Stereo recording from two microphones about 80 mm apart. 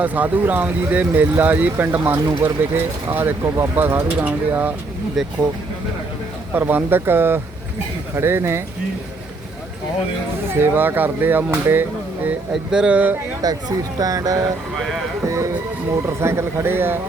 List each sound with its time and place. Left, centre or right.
0.0 s speech: right
6.5 s speech: right
10.5 s speech: right
12.7 s speech: centre
13.4 s speech: right